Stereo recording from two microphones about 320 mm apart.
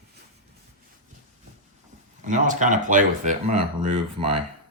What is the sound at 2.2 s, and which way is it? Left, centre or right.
Speech, right.